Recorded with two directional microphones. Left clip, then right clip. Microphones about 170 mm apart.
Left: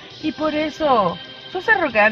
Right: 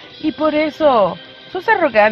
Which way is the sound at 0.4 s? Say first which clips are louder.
Right 6 dB; 40° right (ahead or behind).